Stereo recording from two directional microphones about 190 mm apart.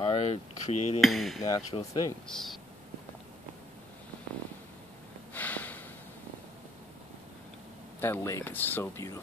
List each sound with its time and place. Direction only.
0.0 s cutlery: 30° left (ahead or behind)
1.0 s hammer: centre (ahead or behind)
1.7 s speech: 35° left (ahead or behind)
2.2 s hammer: centre (ahead or behind)
5.3 s a sound: 10° left (ahead or behind)
8.0 s speech: 15° left (ahead or behind)